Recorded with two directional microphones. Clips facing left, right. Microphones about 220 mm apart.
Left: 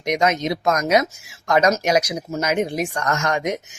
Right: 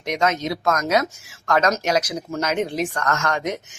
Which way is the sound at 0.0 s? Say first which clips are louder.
Left 2 dB; 15° left (ahead or behind).